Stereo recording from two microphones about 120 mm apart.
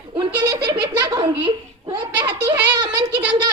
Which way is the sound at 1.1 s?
40° right (ahead or behind).